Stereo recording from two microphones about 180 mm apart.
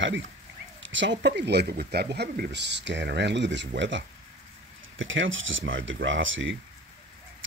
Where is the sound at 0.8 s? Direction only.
90° right.